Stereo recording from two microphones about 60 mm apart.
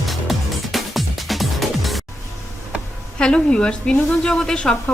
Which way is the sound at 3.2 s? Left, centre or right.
Centre.